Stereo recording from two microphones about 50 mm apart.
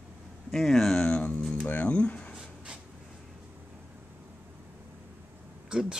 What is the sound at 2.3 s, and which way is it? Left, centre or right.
Writing, centre.